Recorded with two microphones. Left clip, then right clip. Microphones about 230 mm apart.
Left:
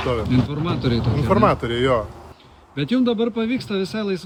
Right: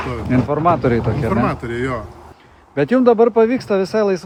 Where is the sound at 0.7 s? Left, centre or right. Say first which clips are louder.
Right 7 dB; right.